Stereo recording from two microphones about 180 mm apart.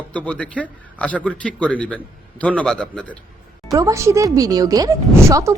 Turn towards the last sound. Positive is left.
turn(degrees=-15)  # may be behind; listen again after turning